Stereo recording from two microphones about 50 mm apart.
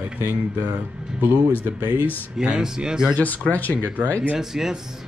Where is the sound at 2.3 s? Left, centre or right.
Centre.